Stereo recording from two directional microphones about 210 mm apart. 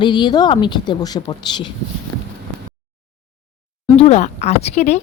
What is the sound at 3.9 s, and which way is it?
Speech, 30° left (ahead or behind).